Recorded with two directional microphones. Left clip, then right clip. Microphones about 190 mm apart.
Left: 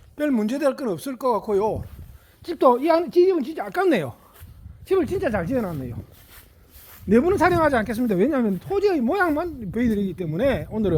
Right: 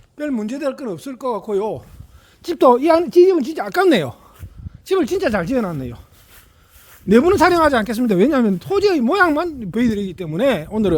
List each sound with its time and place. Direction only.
0.2 s speech: 15° left (ahead or behind)
1.5 s speech: 15° right (ahead or behind)
2.4 s speech: 55° right (ahead or behind)
4.9 s speech: 55° right (ahead or behind)
7.1 s speech: 45° right (ahead or behind)